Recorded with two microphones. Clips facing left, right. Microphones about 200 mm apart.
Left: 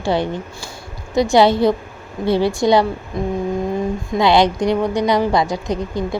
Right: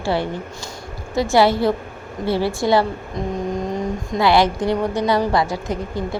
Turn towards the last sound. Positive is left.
turn(degrees=15)  # may be behind; listen again after turning